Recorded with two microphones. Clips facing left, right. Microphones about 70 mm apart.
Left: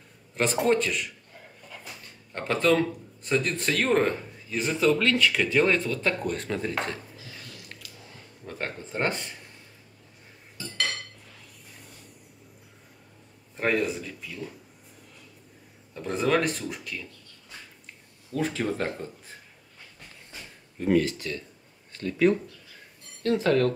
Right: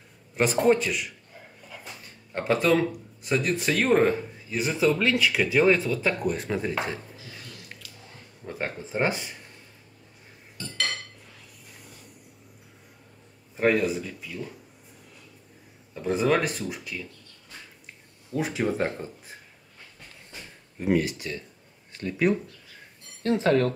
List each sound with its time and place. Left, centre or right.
0.3 s a man's voice: centre
10.6 s cutlery: centre
13.6 s speech: centre
15.9 s speech: centre
18.3 s speech: centre
20.8 s speech: centre